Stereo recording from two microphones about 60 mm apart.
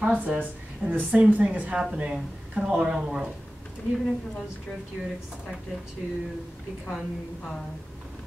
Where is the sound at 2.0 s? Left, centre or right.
Centre.